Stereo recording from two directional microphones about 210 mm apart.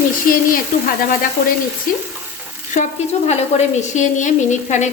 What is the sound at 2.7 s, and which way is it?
Speech, 35° left (ahead or behind).